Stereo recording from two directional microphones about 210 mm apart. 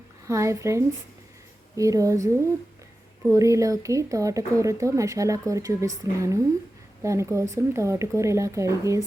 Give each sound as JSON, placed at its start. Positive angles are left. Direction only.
{"t": 0.3, "sound": "speech", "side_deg": -15}